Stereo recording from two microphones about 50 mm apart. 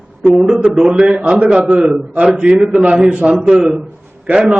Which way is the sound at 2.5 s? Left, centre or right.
Centre.